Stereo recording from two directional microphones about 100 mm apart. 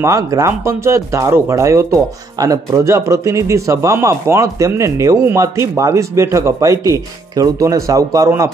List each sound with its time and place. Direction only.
0.0 s speech: 30° right (ahead or behind)